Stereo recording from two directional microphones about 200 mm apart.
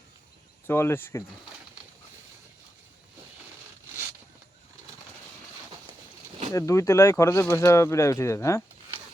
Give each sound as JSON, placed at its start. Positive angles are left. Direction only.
{"t": 0.7, "sound": "speech", "side_deg": 10}
{"t": 6.5, "sound": "speech", "side_deg": 15}